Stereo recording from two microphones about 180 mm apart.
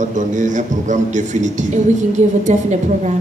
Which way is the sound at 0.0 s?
45° right (ahead or behind).